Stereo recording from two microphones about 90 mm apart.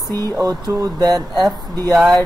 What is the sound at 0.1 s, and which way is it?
Speech, 40° right (ahead or behind).